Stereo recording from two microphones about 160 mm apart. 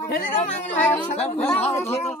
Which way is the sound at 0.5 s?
10° left (ahead or behind).